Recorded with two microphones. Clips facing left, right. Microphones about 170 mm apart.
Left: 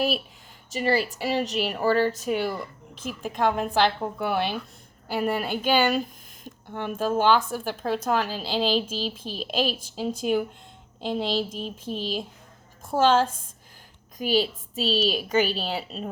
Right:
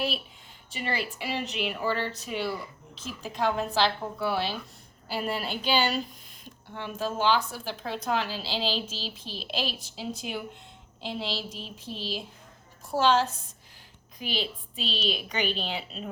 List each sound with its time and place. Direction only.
0.7 s a woman's voice: 40° left (ahead or behind)